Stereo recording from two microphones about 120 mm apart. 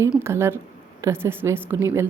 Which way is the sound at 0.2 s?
20° right (ahead or behind).